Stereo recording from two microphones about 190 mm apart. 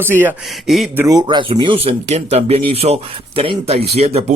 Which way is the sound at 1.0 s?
20° right (ahead or behind).